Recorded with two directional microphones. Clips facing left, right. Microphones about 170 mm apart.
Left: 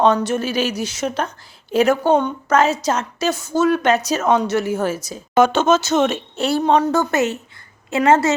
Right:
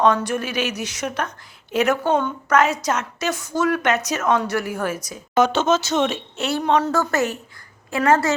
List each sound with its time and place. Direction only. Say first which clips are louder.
0.3 s a woman's voice: left 4 dB; 30° left (ahead or behind)
5.3 s speech: left 3 dB; 50° left (ahead or behind)
6.4 s a woman's voice: left 3 dB; 35° left (ahead or behind)
6.9 s a woman's voice: left 3 dB; 20° left (ahead or behind)